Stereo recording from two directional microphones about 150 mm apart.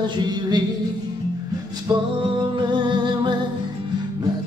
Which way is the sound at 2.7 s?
30° right (ahead or behind).